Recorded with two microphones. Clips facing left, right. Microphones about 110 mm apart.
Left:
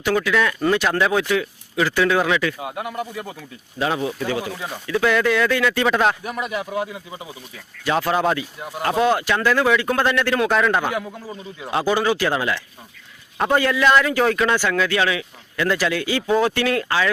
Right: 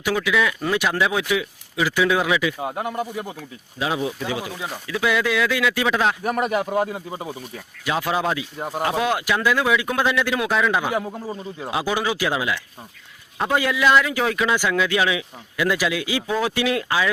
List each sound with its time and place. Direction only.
0.0 s speech: 5° right (ahead or behind)
2.6 s speech: 30° right (ahead or behind)
3.1 s speech: 15° right (ahead or behind)
6.2 s speech: 45° right (ahead or behind)
7.9 s speech: 5° right (ahead or behind)
8.5 s speech: 40° right (ahead or behind)
8.8 s speech: 5° right (ahead or behind)
10.9 s a man's voice: 25° right (ahead or behind)
11.7 s speech: 10° right (ahead or behind)